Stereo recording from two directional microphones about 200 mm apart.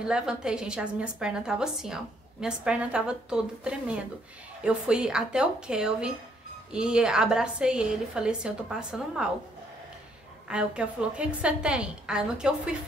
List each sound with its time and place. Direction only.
0.0 s a woman's voice: 5° right (ahead or behind)
10.5 s a woman's voice: 5° right (ahead or behind)